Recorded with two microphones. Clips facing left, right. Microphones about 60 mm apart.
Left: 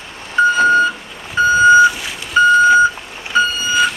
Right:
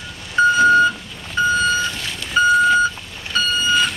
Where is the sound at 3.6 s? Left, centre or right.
Centre.